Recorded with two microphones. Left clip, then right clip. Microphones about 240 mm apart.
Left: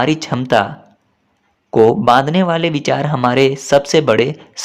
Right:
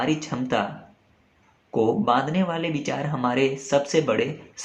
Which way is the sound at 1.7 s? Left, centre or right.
Left.